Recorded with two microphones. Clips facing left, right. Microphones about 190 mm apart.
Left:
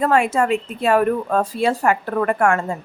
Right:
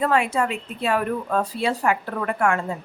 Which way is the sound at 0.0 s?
45° left (ahead or behind).